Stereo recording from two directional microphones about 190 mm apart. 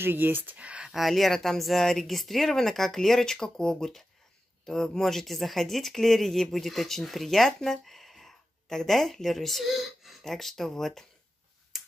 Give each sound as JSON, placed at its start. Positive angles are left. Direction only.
{"t": 0.0, "sound": "speech", "side_deg": -10}
{"t": 11.7, "sound": "finger snapping", "side_deg": 0}